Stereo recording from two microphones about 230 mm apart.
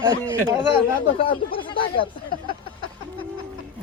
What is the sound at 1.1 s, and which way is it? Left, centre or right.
Speech, left.